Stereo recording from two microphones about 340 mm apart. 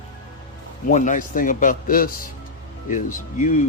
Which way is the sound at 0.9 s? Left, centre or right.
Left.